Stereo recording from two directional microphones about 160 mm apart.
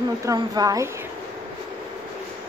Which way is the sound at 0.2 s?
20° right (ahead or behind).